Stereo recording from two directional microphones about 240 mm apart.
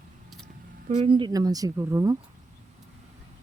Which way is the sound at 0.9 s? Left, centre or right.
Right.